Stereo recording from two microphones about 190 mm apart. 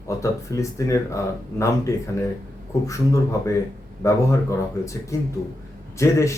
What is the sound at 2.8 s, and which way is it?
Speech, 15° left (ahead or behind).